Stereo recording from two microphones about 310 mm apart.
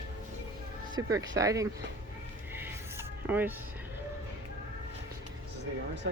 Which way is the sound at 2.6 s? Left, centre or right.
Centre.